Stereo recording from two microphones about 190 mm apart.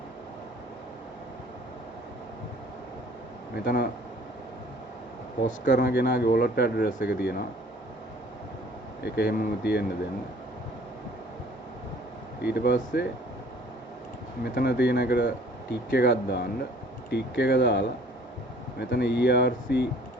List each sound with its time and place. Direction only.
3.5 s speech: 55° left (ahead or behind)
5.5 s speech: 45° left (ahead or behind)
5.9 s speech: 55° left (ahead or behind)
9.0 s speech: 60° left (ahead or behind)
12.4 s speech: 60° left (ahead or behind)
14.4 s speech: 55° left (ahead or behind)